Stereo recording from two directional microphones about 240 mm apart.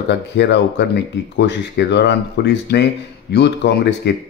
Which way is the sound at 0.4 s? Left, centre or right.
Left.